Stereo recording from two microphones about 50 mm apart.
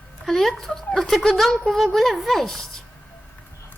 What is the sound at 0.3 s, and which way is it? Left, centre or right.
Speech, centre.